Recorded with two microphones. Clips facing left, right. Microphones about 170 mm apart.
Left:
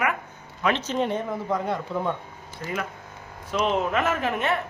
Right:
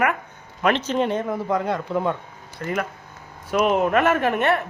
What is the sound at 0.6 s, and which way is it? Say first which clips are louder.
Speech: right 4 dB; 65° right (ahead or behind).